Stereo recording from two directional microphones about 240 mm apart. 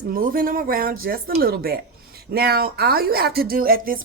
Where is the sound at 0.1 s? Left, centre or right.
Right.